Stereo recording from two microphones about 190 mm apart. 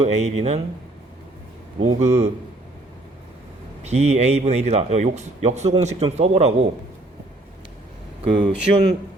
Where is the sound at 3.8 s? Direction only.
35° right (ahead or behind).